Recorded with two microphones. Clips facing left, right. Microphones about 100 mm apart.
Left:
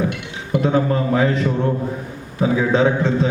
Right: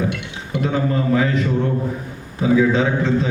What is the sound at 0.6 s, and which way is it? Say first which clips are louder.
Speech: left 1 dB; 35° left (ahead or behind).